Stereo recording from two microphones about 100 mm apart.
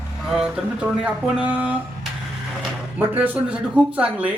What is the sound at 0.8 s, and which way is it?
Speech, 10° right (ahead or behind).